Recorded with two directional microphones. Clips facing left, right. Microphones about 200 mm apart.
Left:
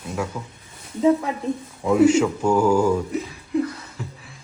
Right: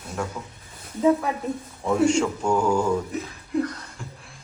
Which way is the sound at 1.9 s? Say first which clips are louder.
Left 4 dB; 5° left (ahead or behind).